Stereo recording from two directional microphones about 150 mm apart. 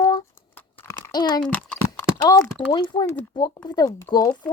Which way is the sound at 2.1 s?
25° left (ahead or behind).